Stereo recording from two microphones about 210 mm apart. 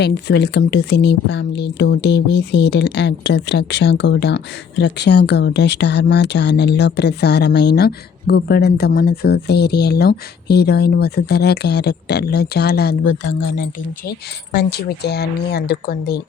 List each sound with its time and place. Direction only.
0.0 s speech: 55° left (ahead or behind)
14.5 s speech: 50° left (ahead or behind)